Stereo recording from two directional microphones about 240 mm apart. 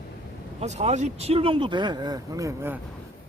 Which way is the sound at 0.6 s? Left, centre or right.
Right.